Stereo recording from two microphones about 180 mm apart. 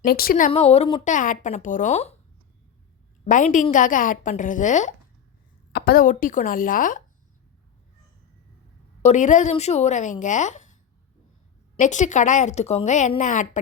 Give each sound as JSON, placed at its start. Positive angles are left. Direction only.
{"t": 0.0, "sound": "a woman's voice", "side_deg": 55}
{"t": 0.5, "sound": "speech", "side_deg": 35}
{"t": 1.0, "sound": "a woman's voice", "side_deg": 45}
{"t": 3.2, "sound": "a woman's voice", "side_deg": 45}
{"t": 5.7, "sound": "a woman's voice", "side_deg": 60}
{"t": 9.0, "sound": "speech", "side_deg": 40}
{"t": 11.8, "sound": "a woman's voice", "side_deg": 40}